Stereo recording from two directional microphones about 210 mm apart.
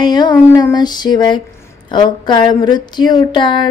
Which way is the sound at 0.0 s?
20° left (ahead or behind).